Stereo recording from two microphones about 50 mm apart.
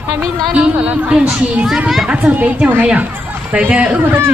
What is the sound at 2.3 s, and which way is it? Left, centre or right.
A woman's voice, right.